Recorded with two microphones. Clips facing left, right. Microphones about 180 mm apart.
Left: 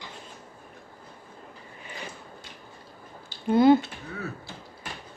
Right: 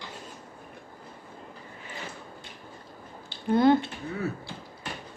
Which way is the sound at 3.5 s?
5° left (ahead or behind).